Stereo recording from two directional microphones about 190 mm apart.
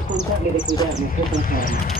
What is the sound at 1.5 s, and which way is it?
Speech, 45° left (ahead or behind).